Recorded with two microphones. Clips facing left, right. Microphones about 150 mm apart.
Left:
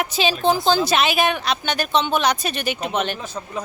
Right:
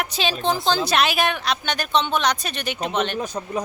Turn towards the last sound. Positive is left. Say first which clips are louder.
# left 1 dB
turn(degrees=5)  # may be behind; listen again after turning